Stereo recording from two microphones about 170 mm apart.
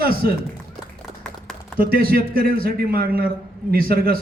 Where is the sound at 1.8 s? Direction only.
60° right (ahead or behind).